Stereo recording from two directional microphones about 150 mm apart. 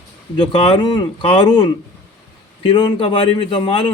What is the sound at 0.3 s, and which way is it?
Speech, 35° left (ahead or behind).